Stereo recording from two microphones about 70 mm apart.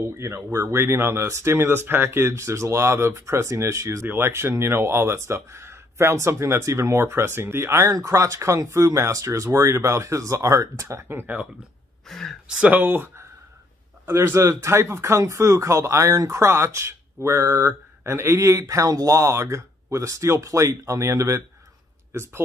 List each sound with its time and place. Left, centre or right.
0.2 s speech: right
7.8 s speech: right
12.1 s speech: centre
12.4 s speech: centre; by 22.4 s right